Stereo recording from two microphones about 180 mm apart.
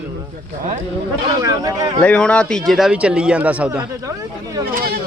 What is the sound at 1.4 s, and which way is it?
Speech, 20° right (ahead or behind).